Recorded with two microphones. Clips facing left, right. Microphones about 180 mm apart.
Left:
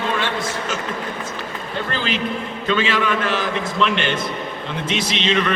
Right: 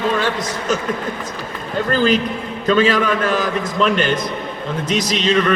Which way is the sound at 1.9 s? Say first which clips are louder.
Right 8 dB; 40° right (ahead or behind).